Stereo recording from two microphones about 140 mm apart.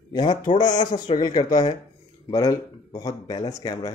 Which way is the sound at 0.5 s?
30° left (ahead or behind).